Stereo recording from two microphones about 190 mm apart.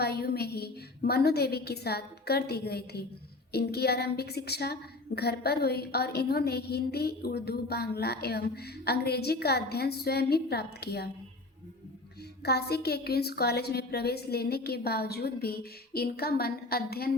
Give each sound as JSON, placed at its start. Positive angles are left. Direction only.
{"t": 0.0, "sound": "a woman's voice", "side_deg": 55}
{"t": 12.4, "sound": "a woman's voice", "side_deg": 60}